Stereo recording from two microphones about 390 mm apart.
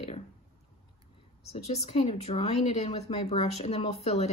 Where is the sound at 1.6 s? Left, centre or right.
Centre.